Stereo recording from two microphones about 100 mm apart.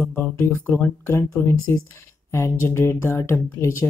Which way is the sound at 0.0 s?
20° left (ahead or behind).